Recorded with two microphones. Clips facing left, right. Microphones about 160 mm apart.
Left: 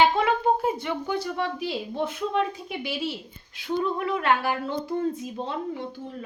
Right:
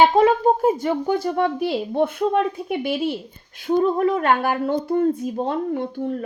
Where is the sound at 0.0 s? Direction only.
45° right (ahead or behind).